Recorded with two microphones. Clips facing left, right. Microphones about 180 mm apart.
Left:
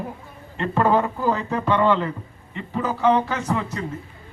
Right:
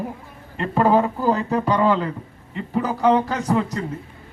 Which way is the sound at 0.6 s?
10° right (ahead or behind).